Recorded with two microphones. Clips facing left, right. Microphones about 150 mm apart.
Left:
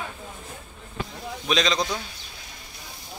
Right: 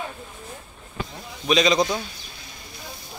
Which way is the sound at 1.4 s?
5° right (ahead or behind).